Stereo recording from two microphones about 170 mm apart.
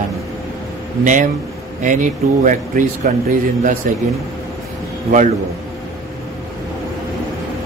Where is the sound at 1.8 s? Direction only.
50° right (ahead or behind).